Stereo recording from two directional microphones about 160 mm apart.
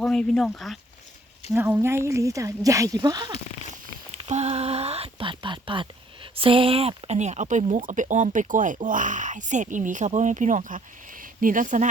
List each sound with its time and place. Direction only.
0.0 s speech: 5° left (ahead or behind)
1.5 s speech: 10° right (ahead or behind)
4.2 s a sound: 40° right (ahead or behind)
6.3 s speech: 35° right (ahead or behind); by 11.9 s 50° right (ahead or behind)